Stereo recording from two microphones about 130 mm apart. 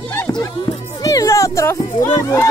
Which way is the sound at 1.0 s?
30° left (ahead or behind).